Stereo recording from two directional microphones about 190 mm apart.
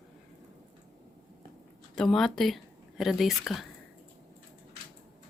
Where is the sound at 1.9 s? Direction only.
5° left (ahead or behind).